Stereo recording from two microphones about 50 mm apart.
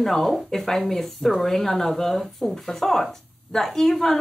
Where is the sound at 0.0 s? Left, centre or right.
Centre.